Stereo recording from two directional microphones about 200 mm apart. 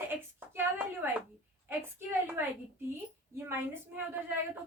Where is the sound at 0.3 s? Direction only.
10° right (ahead or behind).